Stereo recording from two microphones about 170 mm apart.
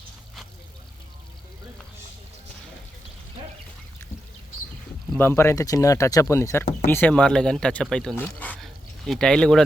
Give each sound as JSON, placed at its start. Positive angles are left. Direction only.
{"t": 5.1, "sound": "speech", "side_deg": 15}